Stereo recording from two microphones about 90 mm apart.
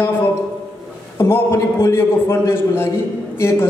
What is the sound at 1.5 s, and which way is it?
A man's voice, 35° left (ahead or behind).